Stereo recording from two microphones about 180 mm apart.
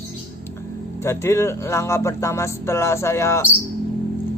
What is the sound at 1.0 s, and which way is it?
A man's voice, 15° left (ahead or behind).